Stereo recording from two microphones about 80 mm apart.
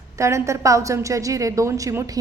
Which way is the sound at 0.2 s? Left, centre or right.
Right.